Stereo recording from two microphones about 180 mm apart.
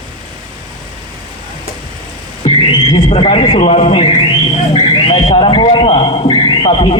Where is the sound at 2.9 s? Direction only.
30° left (ahead or behind).